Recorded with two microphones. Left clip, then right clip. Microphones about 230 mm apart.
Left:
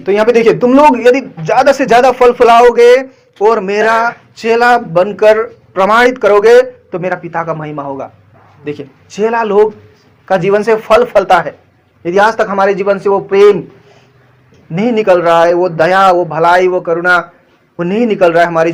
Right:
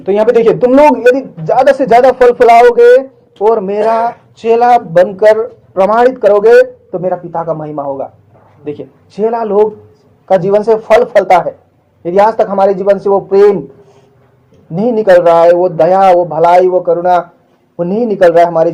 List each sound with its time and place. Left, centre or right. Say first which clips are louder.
0.0 s a man's voice: even; left
9.1 s a man's voice: left 1 dB; left
14.8 s a man's voice: right 3 dB; left